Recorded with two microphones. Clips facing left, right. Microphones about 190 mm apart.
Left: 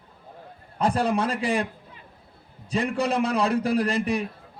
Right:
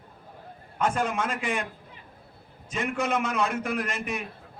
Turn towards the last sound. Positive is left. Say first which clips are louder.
# left 7 dB
turn(degrees=35)  # may be behind; listen again after turning